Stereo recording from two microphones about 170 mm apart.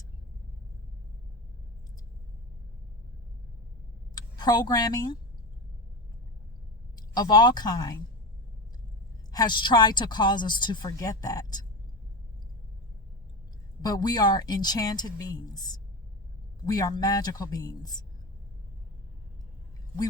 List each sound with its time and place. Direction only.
4.1 s speech: 25° left (ahead or behind)
6.9 s speech: 25° left (ahead or behind)
9.3 s speech: 25° left (ahead or behind)
13.8 s speech: 25° left (ahead or behind)